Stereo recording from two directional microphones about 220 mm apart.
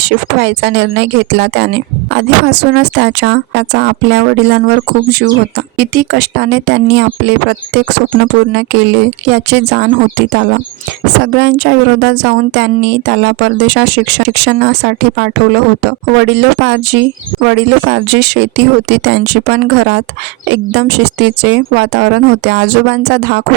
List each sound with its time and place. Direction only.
0.0 s speech: 50° right (ahead or behind)